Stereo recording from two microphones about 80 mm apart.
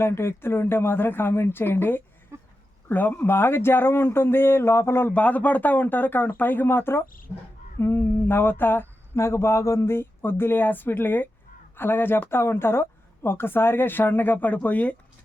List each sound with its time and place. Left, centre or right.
0.0 s speech: left
2.3 s a sound: right
2.9 s speech: left
5.0 s speech: centre